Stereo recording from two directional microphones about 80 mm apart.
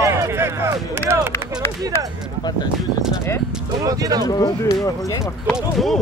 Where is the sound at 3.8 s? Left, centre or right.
Right.